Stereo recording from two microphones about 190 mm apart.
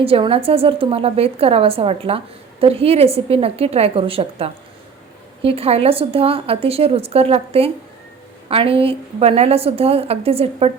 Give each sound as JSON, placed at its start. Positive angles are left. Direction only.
{"t": 0.0, "sound": "a woman's voice", "side_deg": -30}